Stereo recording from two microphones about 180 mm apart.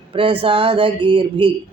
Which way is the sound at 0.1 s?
30° right (ahead or behind).